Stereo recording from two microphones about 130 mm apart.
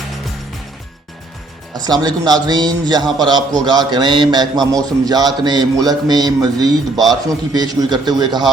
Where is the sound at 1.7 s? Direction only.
30° right (ahead or behind).